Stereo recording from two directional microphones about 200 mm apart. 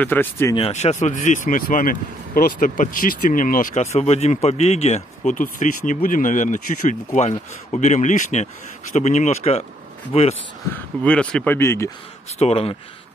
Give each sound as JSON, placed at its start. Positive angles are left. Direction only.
{"t": 0.0, "sound": "speech", "side_deg": 10}
{"t": 0.6, "sound": "speech", "side_deg": 35}
{"t": 10.7, "sound": "speech", "side_deg": 5}
{"t": 12.4, "sound": "speech", "side_deg": 30}